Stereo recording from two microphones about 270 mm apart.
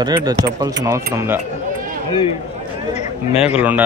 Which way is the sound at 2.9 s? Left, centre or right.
Left.